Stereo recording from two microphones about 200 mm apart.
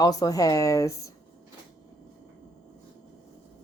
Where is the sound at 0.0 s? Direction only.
20° left (ahead or behind).